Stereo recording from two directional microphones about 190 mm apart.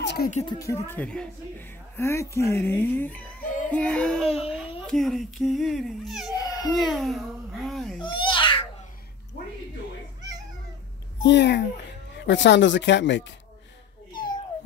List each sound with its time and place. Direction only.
0.0 s a sound: 60° left (ahead or behind)
0.5 s a child's voice: 15° left (ahead or behind); by 6.3 s centre (ahead or behind)
6.3 s baby cry: 20° left (ahead or behind)
6.7 s babbling: centre (ahead or behind)
8.0 s babbling: 25° left (ahead or behind)
11.2 s a child's voice: 65° left (ahead or behind)
14.1 s cat: 25° left (ahead or behind)